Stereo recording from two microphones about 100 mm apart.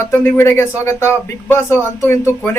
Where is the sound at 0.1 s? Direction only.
20° left (ahead or behind).